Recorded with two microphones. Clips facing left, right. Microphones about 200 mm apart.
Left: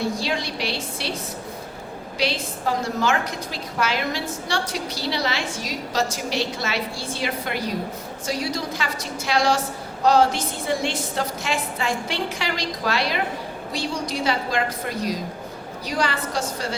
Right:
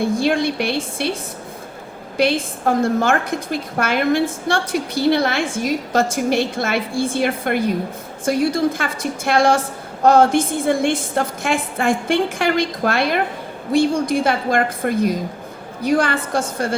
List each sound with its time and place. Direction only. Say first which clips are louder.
0.0 s a woman's voice: right 8 dB; 55° right (ahead or behind)
2.1 s a woman's voice: right 8 dB; 55° right (ahead or behind)